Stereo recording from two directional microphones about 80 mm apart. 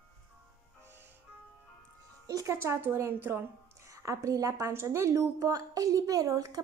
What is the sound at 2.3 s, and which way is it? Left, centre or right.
Speech, right.